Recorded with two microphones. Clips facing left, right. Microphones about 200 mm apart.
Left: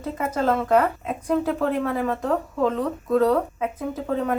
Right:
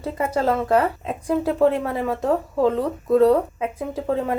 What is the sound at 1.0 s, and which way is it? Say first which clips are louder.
Speech: right 1 dB; 30° right (ahead or behind).